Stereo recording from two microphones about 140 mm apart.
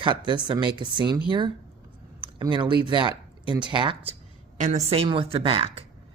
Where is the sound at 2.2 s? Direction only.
35° right (ahead or behind).